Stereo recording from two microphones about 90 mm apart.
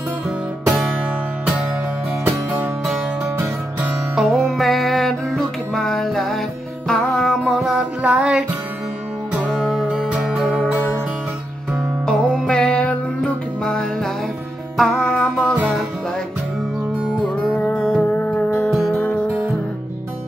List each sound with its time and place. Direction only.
2.2 s music: 20° right (ahead or behind)
4.1 s music: centre (ahead or behind)
12.1 s music: 10° left (ahead or behind)
17.6 s music: 15° left (ahead or behind)